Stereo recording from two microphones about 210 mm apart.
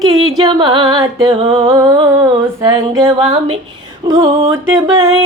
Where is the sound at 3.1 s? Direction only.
30° right (ahead or behind).